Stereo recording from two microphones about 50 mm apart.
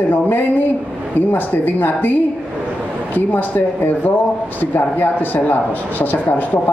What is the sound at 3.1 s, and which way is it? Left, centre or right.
A man's voice, left.